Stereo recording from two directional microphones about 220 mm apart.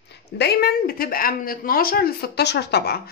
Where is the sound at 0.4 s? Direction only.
45° left (ahead or behind).